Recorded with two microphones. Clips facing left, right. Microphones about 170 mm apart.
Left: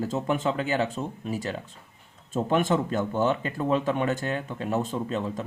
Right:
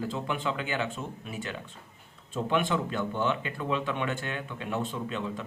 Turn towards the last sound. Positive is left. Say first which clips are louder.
# left 4 dB
turn(degrees=40)  # may be behind; listen again after turning